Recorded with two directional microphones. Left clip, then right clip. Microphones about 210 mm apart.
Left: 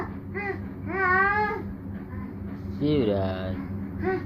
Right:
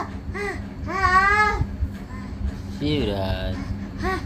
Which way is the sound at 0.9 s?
10° right (ahead or behind).